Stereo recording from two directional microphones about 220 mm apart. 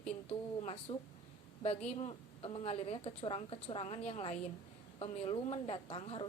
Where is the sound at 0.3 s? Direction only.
25° left (ahead or behind).